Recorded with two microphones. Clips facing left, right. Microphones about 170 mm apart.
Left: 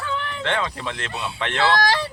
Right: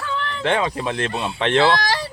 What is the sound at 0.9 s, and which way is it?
Speech, 55° right (ahead or behind).